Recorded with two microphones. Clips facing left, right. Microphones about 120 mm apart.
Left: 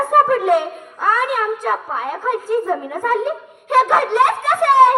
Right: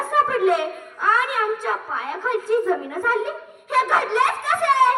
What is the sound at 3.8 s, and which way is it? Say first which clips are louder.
Speech: left 5 dB; 65° left (ahead or behind).